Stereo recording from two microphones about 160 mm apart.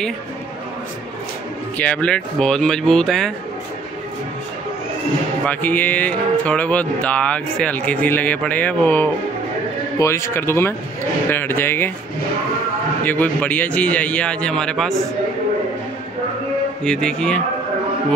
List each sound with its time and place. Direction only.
1.8 s speech: 10° left (ahead or behind)
5.5 s speech: 10° left (ahead or behind)
13.0 s speech: 10° left (ahead or behind)
16.8 s speech: 5° left (ahead or behind)